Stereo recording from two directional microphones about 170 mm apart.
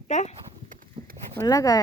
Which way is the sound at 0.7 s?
50° right (ahead or behind).